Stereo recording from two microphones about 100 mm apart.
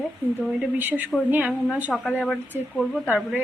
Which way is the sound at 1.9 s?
10° left (ahead or behind).